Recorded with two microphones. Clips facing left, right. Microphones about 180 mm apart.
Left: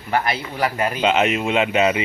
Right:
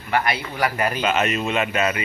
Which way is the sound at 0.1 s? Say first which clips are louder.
Left 1 dB; 25° left (ahead or behind).